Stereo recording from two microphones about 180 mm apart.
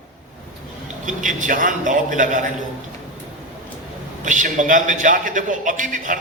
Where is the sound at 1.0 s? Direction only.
45° right (ahead or behind).